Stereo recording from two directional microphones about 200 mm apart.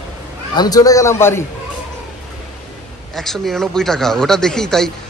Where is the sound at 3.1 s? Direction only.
Centre (ahead or behind).